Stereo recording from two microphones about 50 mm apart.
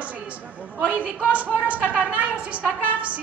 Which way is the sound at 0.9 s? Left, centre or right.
Right.